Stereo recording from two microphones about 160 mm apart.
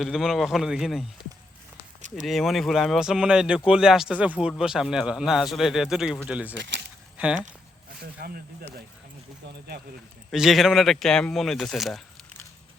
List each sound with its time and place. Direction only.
0.0 s speech: centre (ahead or behind)
2.0 s a sound: 50° right (ahead or behind)
2.2 s speech: centre (ahead or behind)
6.6 s speech: 90° right
7.2 s speech: 10° right (ahead or behind)
8.2 s speech: 70° right (ahead or behind)
10.3 s speech: centre (ahead or behind)